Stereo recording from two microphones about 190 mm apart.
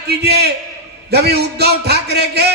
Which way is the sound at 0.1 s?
60° right (ahead or behind).